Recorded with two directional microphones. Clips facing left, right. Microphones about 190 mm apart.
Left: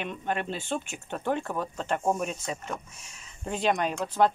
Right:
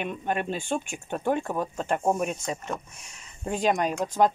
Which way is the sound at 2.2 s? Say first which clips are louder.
Right 3 dB; 45° right (ahead or behind).